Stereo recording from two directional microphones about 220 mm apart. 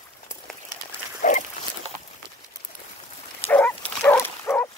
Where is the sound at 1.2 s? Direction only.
35° left (ahead or behind).